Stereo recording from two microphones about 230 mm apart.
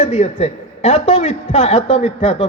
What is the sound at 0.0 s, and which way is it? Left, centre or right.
Speech, left.